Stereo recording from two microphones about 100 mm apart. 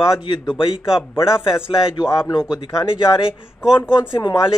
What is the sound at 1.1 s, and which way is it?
Speech, 25° left (ahead or behind).